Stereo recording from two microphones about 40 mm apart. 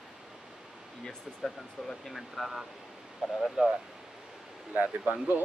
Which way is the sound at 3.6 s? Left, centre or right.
Right.